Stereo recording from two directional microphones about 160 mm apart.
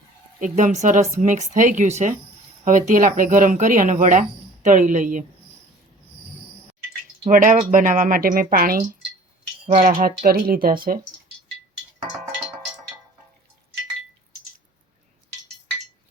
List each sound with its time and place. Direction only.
0.3 s speech: 55° right (ahead or behind)
7.3 s speech: 55° right (ahead or behind)
9.6 s speech: 50° right (ahead or behind)
10.2 s speech: 65° right (ahead or behind)